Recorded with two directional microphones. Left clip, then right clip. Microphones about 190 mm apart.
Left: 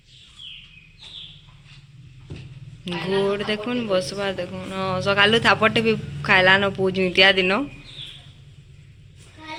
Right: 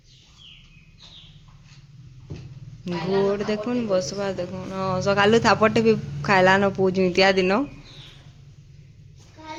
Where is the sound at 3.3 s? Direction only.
15° right (ahead or behind).